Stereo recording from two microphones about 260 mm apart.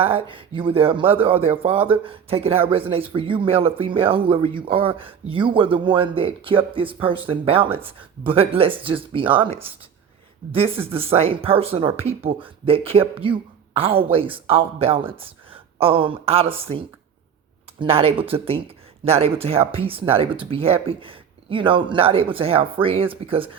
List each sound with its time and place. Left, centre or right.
0.0 s a woman's voice: right